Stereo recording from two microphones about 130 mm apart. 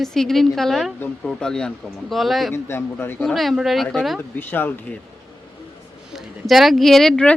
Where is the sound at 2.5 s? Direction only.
15° left (ahead or behind).